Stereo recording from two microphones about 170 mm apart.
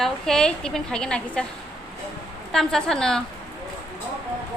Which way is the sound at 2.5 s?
5° left (ahead or behind).